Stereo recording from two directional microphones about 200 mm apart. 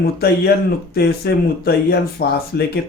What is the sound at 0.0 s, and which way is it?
Speech, 50° left (ahead or behind).